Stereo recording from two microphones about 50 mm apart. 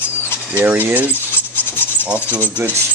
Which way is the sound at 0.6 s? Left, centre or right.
Right.